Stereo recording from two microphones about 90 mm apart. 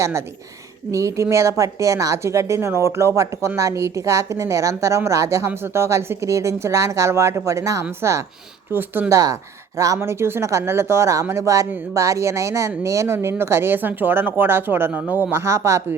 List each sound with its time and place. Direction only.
0.0 s a woman's voice: 30° right (ahead or behind)